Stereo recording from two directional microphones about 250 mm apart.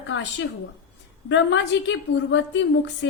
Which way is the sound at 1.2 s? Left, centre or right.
Left.